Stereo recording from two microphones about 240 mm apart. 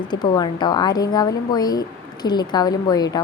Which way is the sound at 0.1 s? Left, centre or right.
Centre.